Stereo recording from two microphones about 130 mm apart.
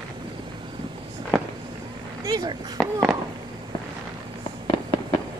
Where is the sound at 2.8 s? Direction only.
Centre (ahead or behind).